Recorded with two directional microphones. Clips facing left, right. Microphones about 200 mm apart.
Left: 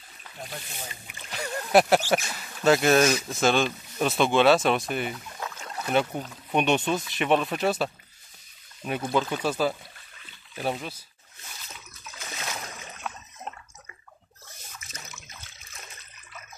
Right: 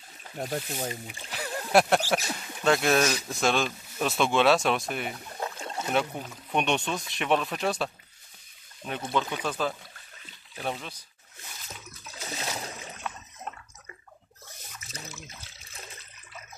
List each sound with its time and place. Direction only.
0.2 s speech: 45° right (ahead or behind)
1.3 s a sound: centre (ahead or behind)
2.6 s speech: centre (ahead or behind)
5.1 s rowboat: 35° right (ahead or behind)
5.9 s speech: centre (ahead or behind)
12.1 s a sound: 35° right (ahead or behind)
14.9 s water: 30° right (ahead or behind)